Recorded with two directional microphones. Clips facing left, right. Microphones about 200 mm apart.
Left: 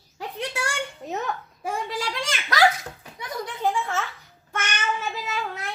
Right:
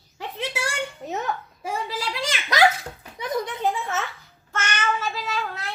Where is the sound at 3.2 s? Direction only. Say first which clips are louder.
Right 2 dB; 20° right (ahead or behind).